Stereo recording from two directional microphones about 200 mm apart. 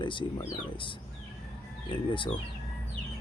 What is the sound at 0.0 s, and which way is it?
Speech, 25° left (ahead or behind).